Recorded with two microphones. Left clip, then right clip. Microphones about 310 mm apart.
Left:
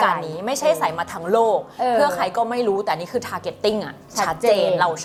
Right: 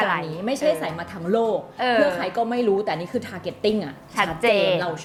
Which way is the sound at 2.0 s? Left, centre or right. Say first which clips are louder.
Left 2 dB; left.